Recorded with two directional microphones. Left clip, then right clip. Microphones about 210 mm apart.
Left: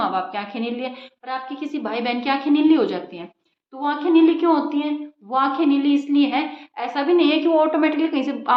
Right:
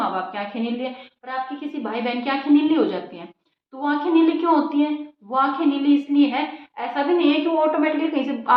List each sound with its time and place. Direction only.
0.3 s a woman's voice: 45° left (ahead or behind)